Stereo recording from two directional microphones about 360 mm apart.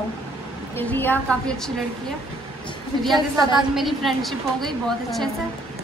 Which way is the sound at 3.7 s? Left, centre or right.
Centre.